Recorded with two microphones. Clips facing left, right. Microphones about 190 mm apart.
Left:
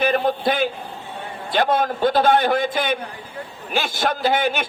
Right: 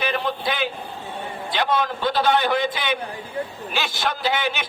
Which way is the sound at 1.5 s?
50° left (ahead or behind).